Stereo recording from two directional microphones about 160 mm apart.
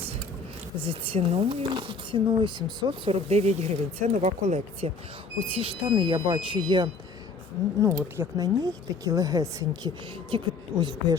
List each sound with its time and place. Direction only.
0.8 s speech: 35° right (ahead or behind)
7.8 s speech: 20° right (ahead or behind)